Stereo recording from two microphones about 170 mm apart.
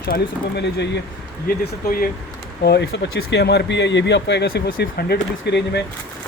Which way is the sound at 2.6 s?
75° left (ahead or behind).